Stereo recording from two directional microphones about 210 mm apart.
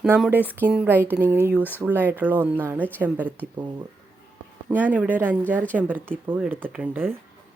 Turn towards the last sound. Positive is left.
turn(degrees=-10)  # may be behind; listen again after turning